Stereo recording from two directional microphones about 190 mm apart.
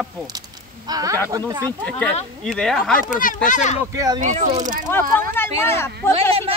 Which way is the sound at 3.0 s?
45° left (ahead or behind).